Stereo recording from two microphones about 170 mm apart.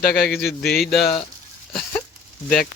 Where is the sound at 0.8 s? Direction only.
Centre (ahead or behind).